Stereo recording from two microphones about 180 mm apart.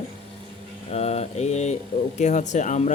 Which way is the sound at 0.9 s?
35° left (ahead or behind).